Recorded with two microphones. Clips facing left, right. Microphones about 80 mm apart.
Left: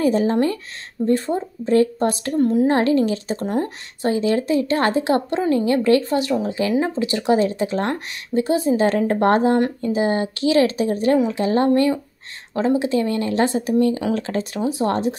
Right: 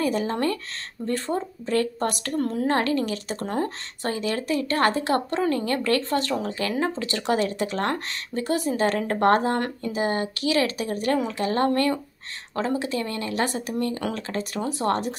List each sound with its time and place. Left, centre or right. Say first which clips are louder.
0.0 s speech: left 6 dB; left
14.6 s speech: left 4 dB; centre